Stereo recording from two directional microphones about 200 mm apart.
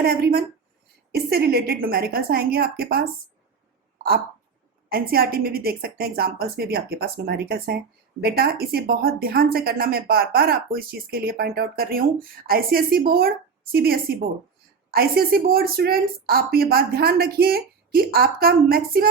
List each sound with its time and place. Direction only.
0.0 s speech: 50° right (ahead or behind)
3.9 s a sound: 50° right (ahead or behind)
4.9 s speech: 50° right (ahead or behind)